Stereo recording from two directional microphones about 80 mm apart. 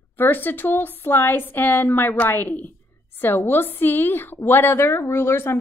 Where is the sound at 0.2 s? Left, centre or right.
Left.